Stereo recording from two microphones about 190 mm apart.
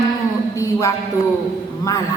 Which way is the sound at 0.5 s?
15° left (ahead or behind).